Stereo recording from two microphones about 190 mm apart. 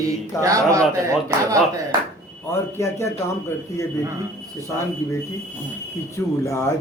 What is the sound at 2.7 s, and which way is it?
Speech, 15° left (ahead or behind).